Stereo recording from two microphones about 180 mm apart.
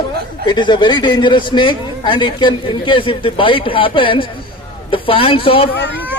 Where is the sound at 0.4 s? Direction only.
25° left (ahead or behind).